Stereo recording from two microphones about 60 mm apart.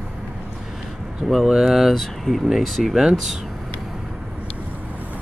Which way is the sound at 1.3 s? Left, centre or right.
Centre.